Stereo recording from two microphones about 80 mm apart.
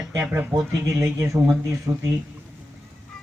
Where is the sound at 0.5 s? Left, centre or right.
Right.